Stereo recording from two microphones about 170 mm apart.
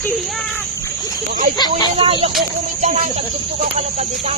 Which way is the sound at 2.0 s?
35° right (ahead or behind).